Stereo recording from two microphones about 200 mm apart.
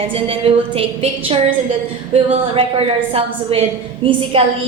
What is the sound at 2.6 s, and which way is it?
A woman's voice, 30° right (ahead or behind).